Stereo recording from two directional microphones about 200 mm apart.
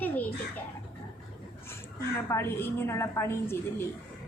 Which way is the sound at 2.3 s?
10° left (ahead or behind).